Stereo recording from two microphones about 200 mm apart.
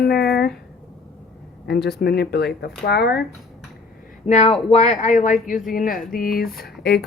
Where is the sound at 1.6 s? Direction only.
55° left (ahead or behind).